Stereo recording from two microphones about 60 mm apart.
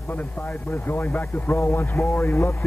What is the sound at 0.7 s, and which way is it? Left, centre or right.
Speech, left.